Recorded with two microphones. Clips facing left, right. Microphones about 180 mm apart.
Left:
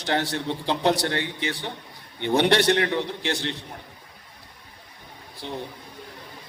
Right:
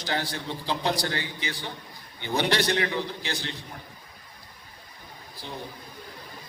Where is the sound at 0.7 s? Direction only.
65° left (ahead or behind).